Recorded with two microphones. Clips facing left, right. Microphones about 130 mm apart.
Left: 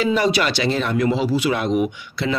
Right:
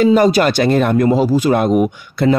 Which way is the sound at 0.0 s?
45° right (ahead or behind).